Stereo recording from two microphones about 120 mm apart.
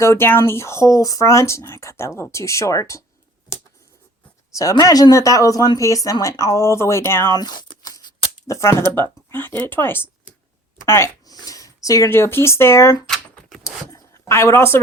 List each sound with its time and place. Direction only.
0.0 s speech: 20° left (ahead or behind)
4.5 s speech: 30° left (ahead or behind)
7.3 s a sound: 35° left (ahead or behind)
8.4 s a woman's voice: 25° left (ahead or behind)
10.8 s zipper: 25° left (ahead or behind)
11.3 s speech: 30° left (ahead or behind)
13.7 s zipper: 25° left (ahead or behind)